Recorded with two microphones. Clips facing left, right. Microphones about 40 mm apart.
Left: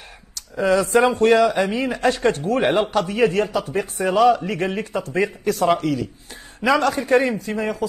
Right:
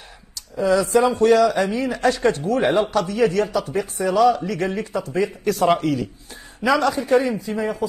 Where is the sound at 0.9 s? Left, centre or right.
Left.